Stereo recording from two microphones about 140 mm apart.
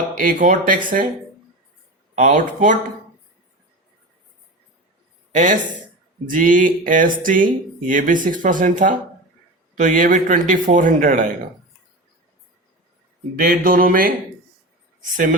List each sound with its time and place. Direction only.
0.2 s speech: 75° right (ahead or behind)
2.1 s speech: 60° right (ahead or behind)
5.3 s speech: 65° right (ahead or behind)
13.4 s speech: 90° right
15.1 s speech: 70° right (ahead or behind)